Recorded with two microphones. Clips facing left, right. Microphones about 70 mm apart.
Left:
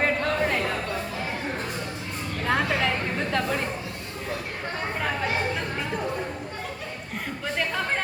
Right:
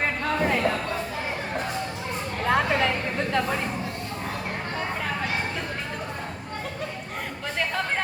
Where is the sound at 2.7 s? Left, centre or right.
Centre.